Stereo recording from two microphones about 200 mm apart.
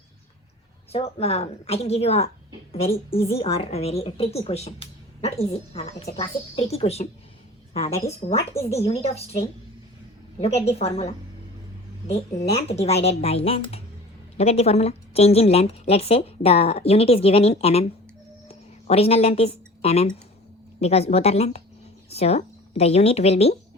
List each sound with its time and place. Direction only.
0.9 s a woman's voice: 30° left (ahead or behind)
3.3 s a woman's voice: 30° left (ahead or behind)
12.1 s a woman's voice: 30° left (ahead or behind)
18.4 s a sound: 30° left (ahead or behind)
20.8 s a woman's voice: 30° left (ahead or behind)